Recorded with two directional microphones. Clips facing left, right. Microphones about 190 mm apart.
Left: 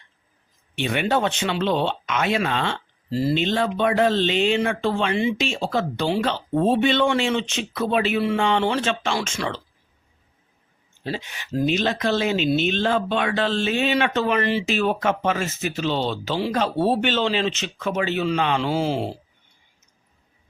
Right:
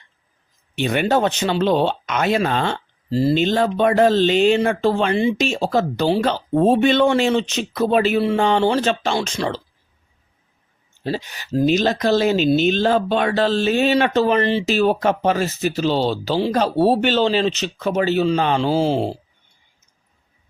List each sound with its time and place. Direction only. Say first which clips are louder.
0.8 s speech: right 4 dB; 40° right (ahead or behind)
3.1 s speech: right 4 dB; 30° right (ahead or behind)
3.3 s speech: right 4 dB; 40° right (ahead or behind)
11.0 s speech: right 5 dB; 40° right (ahead or behind)